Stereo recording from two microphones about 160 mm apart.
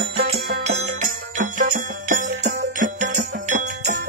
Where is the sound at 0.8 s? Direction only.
55° right (ahead or behind).